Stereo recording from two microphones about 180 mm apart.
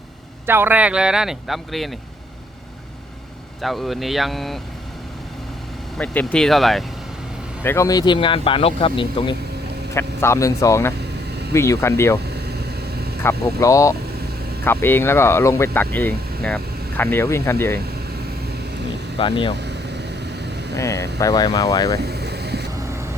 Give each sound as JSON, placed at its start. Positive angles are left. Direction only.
{"t": 0.4, "sound": "speech", "side_deg": -10}
{"t": 3.6, "sound": "speech", "side_deg": 0}
{"t": 6.0, "sound": "speech", "side_deg": 5}
{"t": 7.6, "sound": "speech", "side_deg": 15}
{"t": 9.9, "sound": "speech", "side_deg": 15}
{"t": 12.2, "sound": "a sound", "side_deg": -65}
{"t": 13.6, "sound": "speech", "side_deg": 15}
{"t": 19.2, "sound": "speech", "side_deg": 25}
{"t": 19.5, "sound": "vehicle", "side_deg": -70}
{"t": 20.7, "sound": "speech", "side_deg": 15}
{"t": 21.9, "sound": "air conditioning", "side_deg": -65}